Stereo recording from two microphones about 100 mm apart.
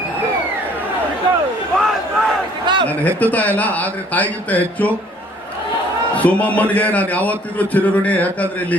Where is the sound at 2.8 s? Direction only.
15° left (ahead or behind).